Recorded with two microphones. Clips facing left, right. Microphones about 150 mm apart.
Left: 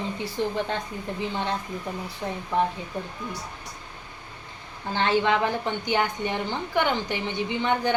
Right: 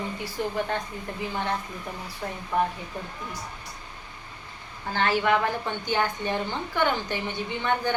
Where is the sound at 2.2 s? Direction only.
10° left (ahead or behind).